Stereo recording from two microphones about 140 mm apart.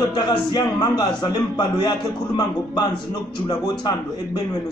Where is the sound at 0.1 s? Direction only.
30° left (ahead or behind).